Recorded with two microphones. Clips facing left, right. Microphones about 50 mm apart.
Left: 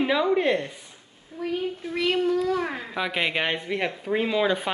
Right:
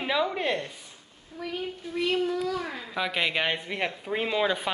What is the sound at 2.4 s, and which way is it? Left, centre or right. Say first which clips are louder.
Speech: left 5 dB; left.